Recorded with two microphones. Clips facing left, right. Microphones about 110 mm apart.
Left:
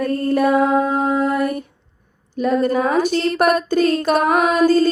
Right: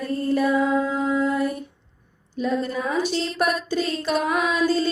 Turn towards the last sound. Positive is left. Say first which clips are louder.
# left 7 dB
turn(degrees=50)  # may be behind; listen again after turning